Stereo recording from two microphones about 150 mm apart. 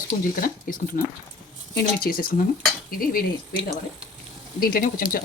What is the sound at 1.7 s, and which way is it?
Speech, 75° left (ahead or behind).